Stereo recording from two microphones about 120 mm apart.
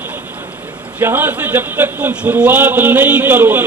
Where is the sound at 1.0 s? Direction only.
15° right (ahead or behind).